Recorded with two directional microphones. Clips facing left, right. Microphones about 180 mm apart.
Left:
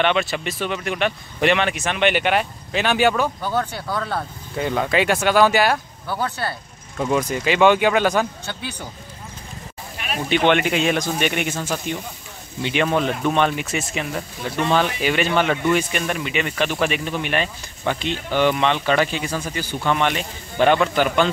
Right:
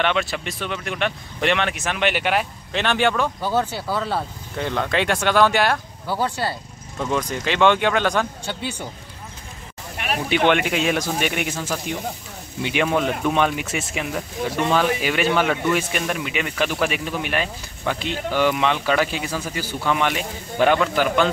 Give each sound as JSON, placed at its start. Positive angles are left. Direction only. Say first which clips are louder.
{"t": 0.0, "sound": "speech", "louder": "left 2 dB", "side_deg": 0}
{"t": 3.4, "sound": "speech", "louder": "right 1 dB", "side_deg": -10}
{"t": 4.6, "sound": "speech", "louder": "left 2 dB", "side_deg": 5}
{"t": 6.0, "sound": "speech", "louder": "right 2 dB", "side_deg": -10}
{"t": 7.0, "sound": "speech", "louder": "left 3 dB", "side_deg": 10}
{"t": 10.0, "sound": "a sound", "louder": "right 4 dB", "side_deg": -65}
{"t": 10.3, "sound": "speech", "louder": "left 1 dB", "side_deg": -5}